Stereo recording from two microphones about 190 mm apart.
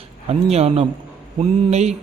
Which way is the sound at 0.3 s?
35° right (ahead or behind).